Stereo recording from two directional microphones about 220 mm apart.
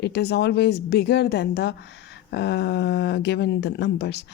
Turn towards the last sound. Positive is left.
turn(degrees=50)  # may be behind; listen again after turning